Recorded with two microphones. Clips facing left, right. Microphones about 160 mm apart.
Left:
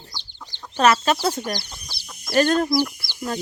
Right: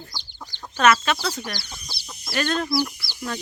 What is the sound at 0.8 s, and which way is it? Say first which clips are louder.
Speech: left 1 dB; 35° left (ahead or behind).